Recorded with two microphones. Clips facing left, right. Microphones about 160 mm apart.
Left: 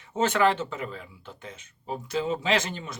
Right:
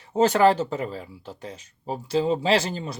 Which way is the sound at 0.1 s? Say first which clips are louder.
Right 5 dB; 35° right (ahead or behind).